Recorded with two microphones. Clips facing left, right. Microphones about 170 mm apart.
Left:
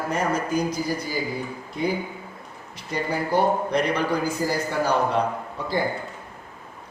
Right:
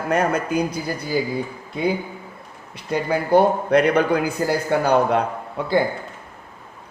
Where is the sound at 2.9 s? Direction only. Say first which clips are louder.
Right 6 dB; 60° right (ahead or behind).